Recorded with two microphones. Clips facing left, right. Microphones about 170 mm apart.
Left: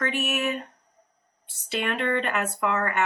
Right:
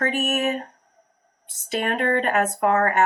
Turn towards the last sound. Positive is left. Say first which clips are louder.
# right 6 dB
turn(degrees=-40)  # may be behind; listen again after turning